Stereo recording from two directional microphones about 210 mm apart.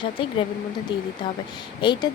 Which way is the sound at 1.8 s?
20° left (ahead or behind).